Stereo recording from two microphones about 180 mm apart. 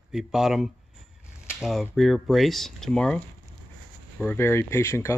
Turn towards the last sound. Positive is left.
turn(degrees=15)  # may be behind; listen again after turning